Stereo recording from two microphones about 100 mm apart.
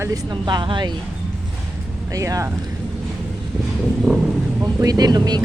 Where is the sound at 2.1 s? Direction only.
35° right (ahead or behind).